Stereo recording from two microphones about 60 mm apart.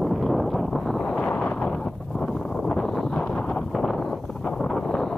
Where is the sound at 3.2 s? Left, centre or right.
Centre.